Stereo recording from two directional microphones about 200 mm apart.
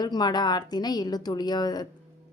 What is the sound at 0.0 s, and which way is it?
A woman's voice, 20° left (ahead or behind).